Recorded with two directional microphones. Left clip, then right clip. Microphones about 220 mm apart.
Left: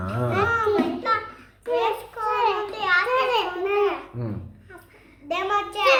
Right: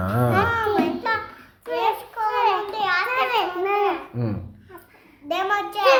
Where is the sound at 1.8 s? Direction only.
10° right (ahead or behind).